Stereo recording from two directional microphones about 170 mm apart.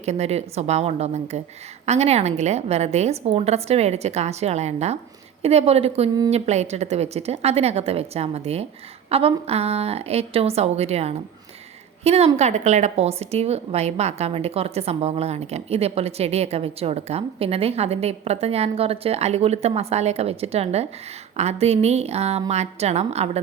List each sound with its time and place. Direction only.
0.0 s a woman's voice: 40° right (ahead or behind)